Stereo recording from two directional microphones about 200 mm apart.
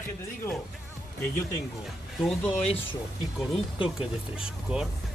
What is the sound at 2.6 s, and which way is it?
Speech, 30° left (ahead or behind).